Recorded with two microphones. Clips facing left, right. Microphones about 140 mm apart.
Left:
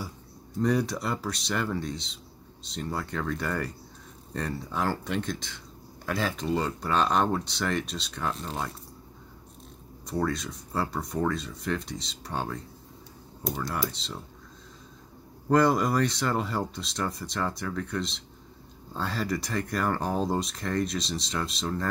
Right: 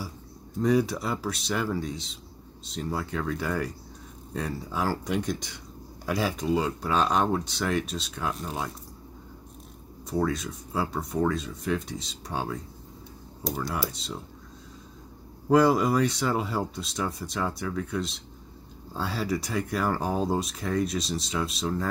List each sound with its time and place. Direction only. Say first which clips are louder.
0.6 s speech: right 2 dB; 5° right (ahead or behind)
10.0 s speech: right 2 dB; 5° right (ahead or behind)
15.4 s speech: right 2 dB; 5° right (ahead or behind)